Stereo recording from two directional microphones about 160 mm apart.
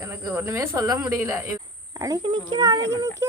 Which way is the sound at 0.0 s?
15° right (ahead or behind).